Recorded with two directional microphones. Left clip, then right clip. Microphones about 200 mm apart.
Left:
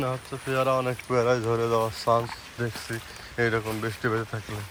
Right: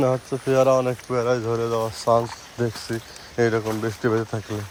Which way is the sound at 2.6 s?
20° right (ahead or behind).